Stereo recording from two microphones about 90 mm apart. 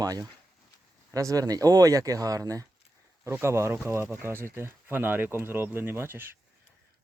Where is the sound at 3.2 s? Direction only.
30° right (ahead or behind).